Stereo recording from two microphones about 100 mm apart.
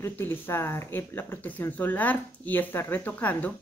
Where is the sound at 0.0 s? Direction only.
20° left (ahead or behind).